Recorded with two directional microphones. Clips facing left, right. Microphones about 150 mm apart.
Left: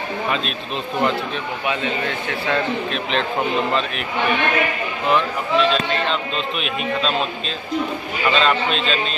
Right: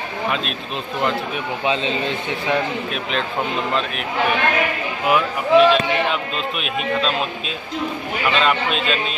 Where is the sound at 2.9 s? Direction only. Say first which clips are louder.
Left 2 dB; 5° right (ahead or behind).